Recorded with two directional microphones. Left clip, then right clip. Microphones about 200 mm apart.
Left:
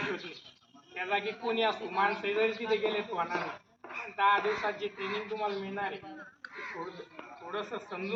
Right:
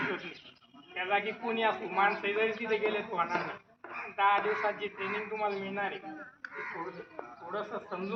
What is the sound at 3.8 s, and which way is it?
Radio, 60° left (ahead or behind).